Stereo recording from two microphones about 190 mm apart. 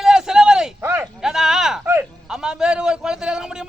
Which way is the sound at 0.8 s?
15° right (ahead or behind).